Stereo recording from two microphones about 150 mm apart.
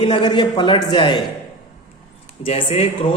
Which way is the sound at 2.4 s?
40° left (ahead or behind).